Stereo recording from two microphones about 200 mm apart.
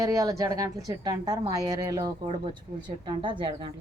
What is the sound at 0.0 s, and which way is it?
A woman's voice, 15° right (ahead or behind).